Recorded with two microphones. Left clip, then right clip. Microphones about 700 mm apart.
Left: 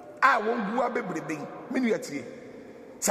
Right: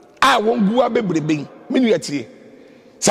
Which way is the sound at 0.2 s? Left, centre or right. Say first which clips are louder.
Right 8 dB; right.